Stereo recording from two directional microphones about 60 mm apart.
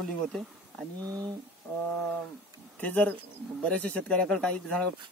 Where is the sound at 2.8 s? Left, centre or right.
Left.